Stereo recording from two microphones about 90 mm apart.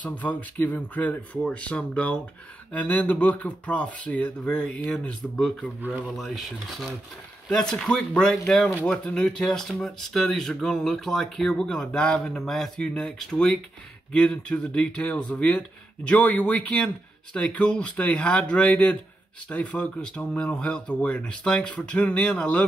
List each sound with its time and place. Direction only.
0.0 s speech: 15° left (ahead or behind)